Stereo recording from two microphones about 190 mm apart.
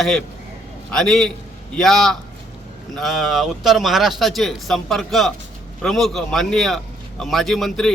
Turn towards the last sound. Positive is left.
turn(degrees=0)  # may be behind; listen again after turning